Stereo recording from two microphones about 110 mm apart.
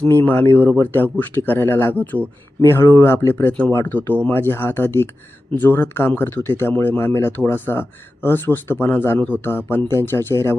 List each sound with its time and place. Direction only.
0.3 s speech: 20° left (ahead or behind)